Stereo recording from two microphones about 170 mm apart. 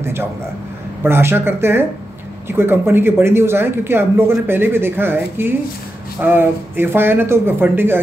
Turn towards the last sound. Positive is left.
turn(degrees=-15)  # may be behind; listen again after turning